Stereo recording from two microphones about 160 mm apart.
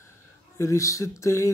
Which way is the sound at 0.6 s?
20° left (ahead or behind).